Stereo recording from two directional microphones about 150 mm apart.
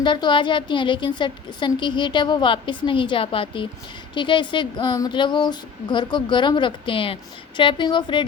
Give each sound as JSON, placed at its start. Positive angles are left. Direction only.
{"t": 0.0, "sound": "speech", "side_deg": 30}